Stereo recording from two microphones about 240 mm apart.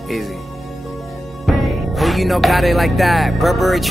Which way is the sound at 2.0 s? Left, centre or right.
Centre.